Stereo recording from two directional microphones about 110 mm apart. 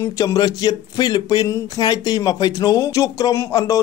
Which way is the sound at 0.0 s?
35° left (ahead or behind).